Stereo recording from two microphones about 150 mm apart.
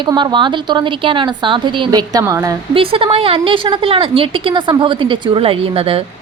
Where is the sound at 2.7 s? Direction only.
35° right (ahead or behind).